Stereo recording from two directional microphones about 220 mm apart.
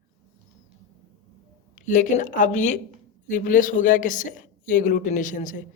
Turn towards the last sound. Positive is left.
turn(degrees=35)  # may be behind; listen again after turning